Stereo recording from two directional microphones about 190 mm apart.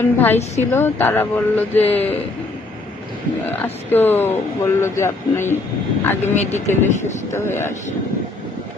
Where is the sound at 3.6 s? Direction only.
10° left (ahead or behind).